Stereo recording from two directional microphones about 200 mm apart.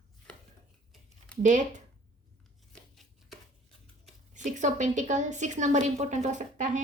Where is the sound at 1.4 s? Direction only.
40° right (ahead or behind).